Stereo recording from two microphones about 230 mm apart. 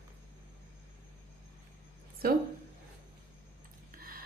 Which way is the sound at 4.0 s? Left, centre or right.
Right.